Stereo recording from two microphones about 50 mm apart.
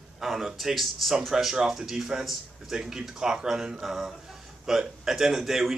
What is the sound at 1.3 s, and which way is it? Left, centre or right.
Speech, centre.